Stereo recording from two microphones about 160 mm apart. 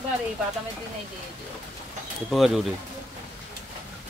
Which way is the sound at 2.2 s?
Centre (ahead or behind).